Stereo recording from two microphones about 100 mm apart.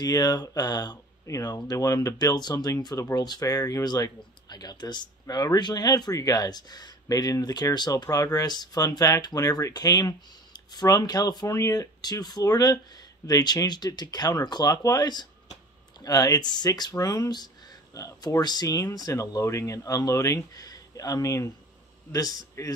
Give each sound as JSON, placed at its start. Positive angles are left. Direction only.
{"t": 0.0, "sound": "speech", "side_deg": 40}